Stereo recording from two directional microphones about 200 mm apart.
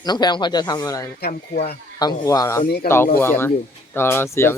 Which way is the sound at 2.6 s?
50° left (ahead or behind).